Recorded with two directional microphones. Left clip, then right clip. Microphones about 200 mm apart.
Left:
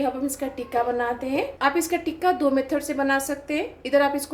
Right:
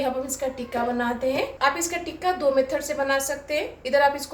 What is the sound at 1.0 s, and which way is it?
A woman's voice, 45° left (ahead or behind).